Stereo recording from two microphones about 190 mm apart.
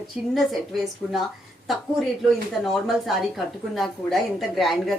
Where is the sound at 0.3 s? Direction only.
Centre (ahead or behind).